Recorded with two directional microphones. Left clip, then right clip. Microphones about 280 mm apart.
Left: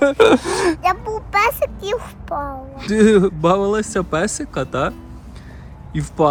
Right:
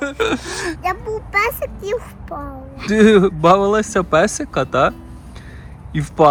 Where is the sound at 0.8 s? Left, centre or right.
Centre.